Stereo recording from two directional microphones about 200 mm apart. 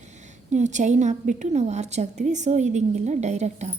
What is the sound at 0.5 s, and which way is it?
A woman's voice, 35° right (ahead or behind).